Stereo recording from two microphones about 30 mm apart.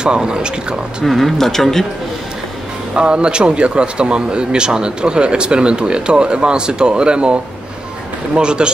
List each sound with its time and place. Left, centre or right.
0.0 s speech: right
1.0 s speech: centre
2.9 s a man's voice: right
8.4 s a man's voice: right